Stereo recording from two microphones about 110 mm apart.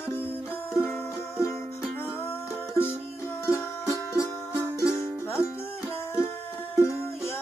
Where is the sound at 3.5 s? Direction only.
30° left (ahead or behind).